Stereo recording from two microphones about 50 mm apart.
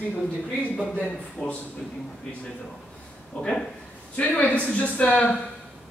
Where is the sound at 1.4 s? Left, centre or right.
Left.